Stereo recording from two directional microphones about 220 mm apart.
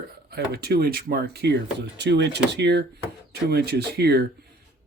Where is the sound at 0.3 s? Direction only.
45° right (ahead or behind).